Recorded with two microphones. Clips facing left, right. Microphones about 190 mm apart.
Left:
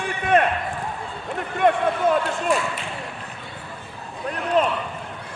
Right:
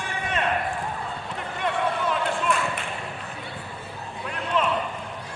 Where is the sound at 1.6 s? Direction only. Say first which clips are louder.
Left 7 dB; 50° left (ahead or behind).